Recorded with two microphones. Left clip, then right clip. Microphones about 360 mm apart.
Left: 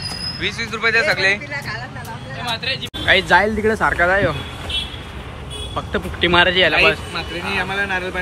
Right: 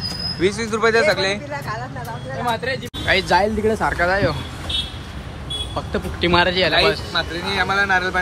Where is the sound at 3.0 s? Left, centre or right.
Centre.